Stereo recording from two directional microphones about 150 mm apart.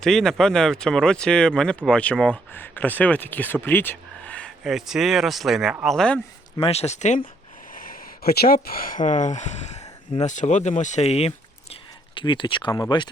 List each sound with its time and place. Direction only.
0.0 s speech: 5° left (ahead or behind)
6.6 s speech: 45° left (ahead or behind)
7.7 s speech: 70° left (ahead or behind); by 13.1 s 25° left (ahead or behind)